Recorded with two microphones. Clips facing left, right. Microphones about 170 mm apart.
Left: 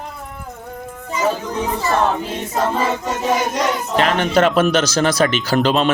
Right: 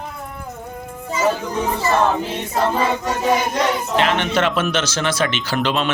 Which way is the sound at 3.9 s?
40° left (ahead or behind).